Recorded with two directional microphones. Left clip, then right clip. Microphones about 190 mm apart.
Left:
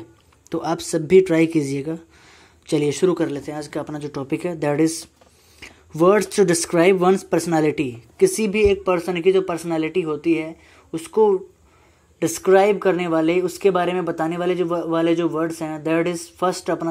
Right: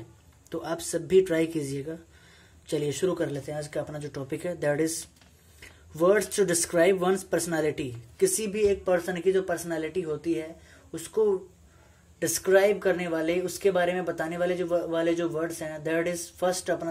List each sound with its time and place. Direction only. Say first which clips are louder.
0.5 s speech: left 8 dB; 25° left (ahead or behind)
9.5 s speech: left 7 dB; 20° left (ahead or behind)